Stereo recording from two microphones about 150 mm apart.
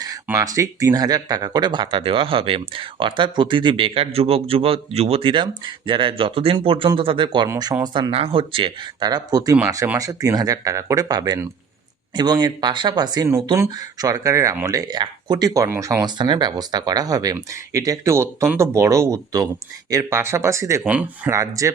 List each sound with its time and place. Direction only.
0.3 s speech: 20° right (ahead or behind)
7.4 s speech: 25° right (ahead or behind)
8.1 s speech: 40° right (ahead or behind); by 21.3 s 10° right (ahead or behind)
21.3 s speech: 20° right (ahead or behind)